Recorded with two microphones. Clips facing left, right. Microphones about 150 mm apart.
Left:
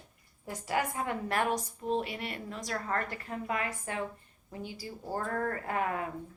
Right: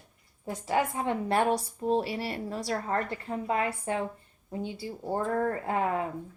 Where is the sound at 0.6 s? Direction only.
25° right (ahead or behind).